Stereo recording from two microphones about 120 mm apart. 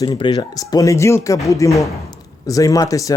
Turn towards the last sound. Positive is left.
turn(degrees=30)  # may be behind; listen again after turning